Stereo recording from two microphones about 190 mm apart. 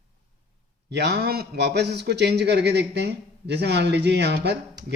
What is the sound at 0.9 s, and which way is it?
A man's voice, 60° right (ahead or behind).